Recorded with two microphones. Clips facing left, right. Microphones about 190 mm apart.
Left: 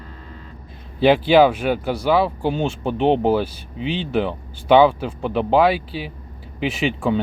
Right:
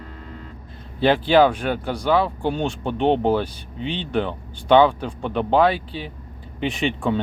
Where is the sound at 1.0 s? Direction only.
10° left (ahead or behind).